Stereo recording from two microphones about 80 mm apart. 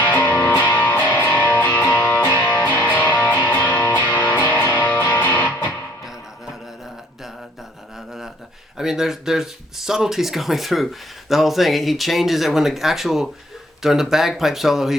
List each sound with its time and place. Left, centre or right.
0.0 s music: left
7.9 s a sound: centre
8.8 s speech: centre